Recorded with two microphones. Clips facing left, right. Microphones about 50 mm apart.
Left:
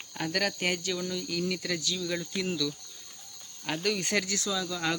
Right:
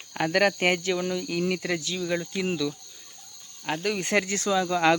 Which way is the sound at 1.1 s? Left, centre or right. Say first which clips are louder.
Right 5 dB; right.